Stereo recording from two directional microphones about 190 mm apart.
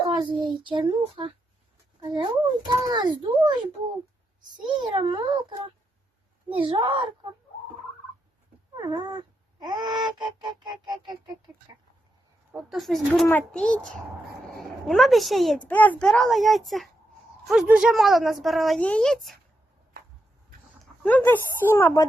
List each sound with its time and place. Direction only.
0.1 s a child's voice: 25° right (ahead or behind)
8.8 s cat: 20° right (ahead or behind)
11.0 s a child's voice: 20° right (ahead or behind)
12.5 s a woman's voice: centre (ahead or behind)
21.0 s a child's voice: 10° left (ahead or behind)